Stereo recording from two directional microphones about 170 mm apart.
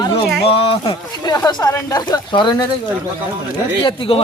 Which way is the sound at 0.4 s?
30° left (ahead or behind).